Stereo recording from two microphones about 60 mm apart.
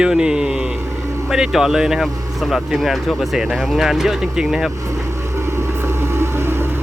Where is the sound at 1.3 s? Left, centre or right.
Centre.